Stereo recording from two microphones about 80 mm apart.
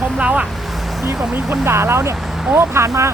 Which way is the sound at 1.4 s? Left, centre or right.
Centre.